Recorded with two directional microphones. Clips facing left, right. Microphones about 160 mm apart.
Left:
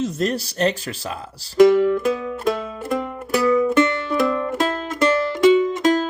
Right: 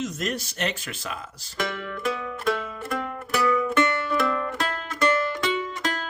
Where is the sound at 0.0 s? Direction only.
30° left (ahead or behind).